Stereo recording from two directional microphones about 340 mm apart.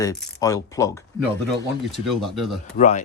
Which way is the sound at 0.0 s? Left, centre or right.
Centre.